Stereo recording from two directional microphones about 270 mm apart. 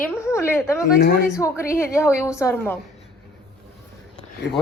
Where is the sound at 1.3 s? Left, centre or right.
Centre.